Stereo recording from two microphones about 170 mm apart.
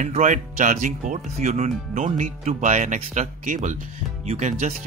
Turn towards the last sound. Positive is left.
turn(degrees=-45)  # may be behind; listen again after turning